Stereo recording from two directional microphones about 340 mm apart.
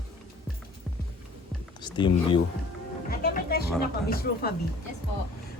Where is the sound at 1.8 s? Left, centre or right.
Centre.